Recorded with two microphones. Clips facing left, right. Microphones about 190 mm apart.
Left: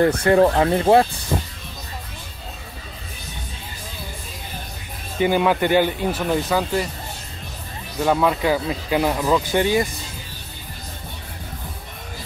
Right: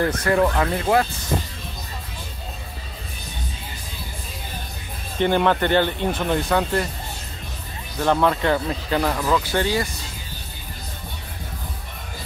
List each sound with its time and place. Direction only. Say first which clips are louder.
0.0 s speech: left 4 dB; 30° left (ahead or behind)
5.2 s speech: left 1 dB; 10° left (ahead or behind)
8.0 s speech: left 1 dB; 5° left (ahead or behind)